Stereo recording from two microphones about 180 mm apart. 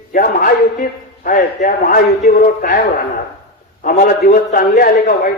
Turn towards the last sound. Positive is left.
turn(degrees=50)  # may be behind; listen again after turning